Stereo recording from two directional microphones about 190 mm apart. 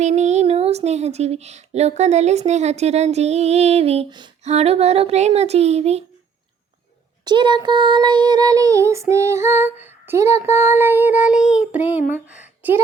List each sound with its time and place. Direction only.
0.0 s speech: 35° right (ahead or behind)
7.3 s child singing: 25° right (ahead or behind)
12.1 s speech: 10° right (ahead or behind)